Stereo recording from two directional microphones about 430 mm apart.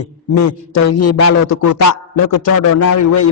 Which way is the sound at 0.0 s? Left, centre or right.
Left.